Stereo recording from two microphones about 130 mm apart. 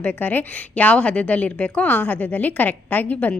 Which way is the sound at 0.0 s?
15° left (ahead or behind).